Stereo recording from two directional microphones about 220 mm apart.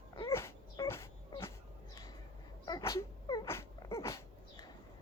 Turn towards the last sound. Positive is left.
turn(degrees=15)  # may be behind; listen again after turning